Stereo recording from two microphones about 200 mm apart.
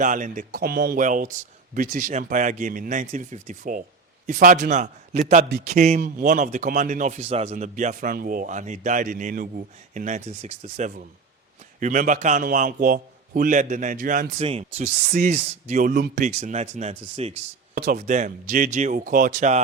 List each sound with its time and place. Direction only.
0.0 s speech: 40° right (ahead or behind)
14.3 s speech: 30° right (ahead or behind)